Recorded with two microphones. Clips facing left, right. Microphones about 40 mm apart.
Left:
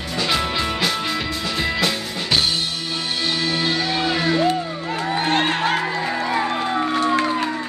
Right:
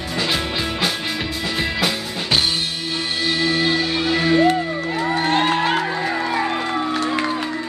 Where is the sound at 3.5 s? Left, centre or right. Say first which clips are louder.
Right 2 dB; centre.